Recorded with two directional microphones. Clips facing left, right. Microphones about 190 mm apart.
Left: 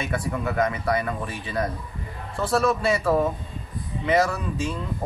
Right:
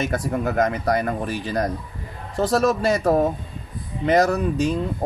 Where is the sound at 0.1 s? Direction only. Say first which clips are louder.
Right 4 dB; 40° right (ahead or behind).